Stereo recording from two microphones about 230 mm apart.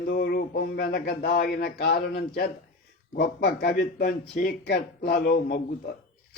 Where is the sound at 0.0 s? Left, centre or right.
Left.